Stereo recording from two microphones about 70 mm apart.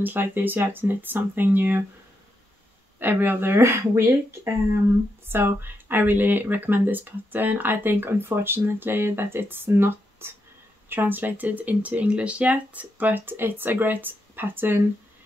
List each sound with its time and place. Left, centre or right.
0.0 s speech: right
3.0 s speech: right